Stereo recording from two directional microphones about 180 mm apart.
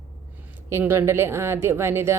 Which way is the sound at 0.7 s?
15° right (ahead or behind).